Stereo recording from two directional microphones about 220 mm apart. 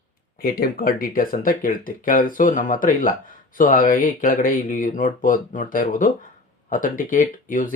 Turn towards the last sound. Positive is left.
turn(degrees=35)  # may be behind; listen again after turning